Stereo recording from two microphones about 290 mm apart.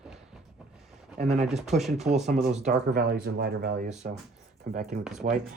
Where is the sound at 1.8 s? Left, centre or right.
Centre.